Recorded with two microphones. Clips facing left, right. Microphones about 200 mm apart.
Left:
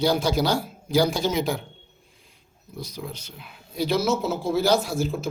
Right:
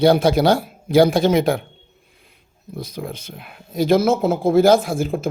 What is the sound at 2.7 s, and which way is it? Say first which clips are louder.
Speech: right 6 dB; 55° right (ahead or behind).